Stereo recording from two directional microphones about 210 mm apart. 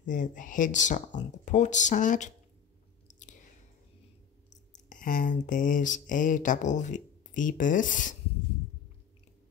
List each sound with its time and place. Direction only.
0.0 s speech: 40° left (ahead or behind)
3.1 s chewing: 35° left (ahead or behind)
4.5 s a sound: 35° left (ahead or behind)